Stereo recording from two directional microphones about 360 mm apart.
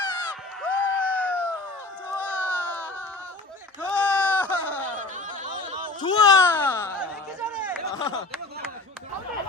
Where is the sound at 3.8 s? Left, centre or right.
Centre.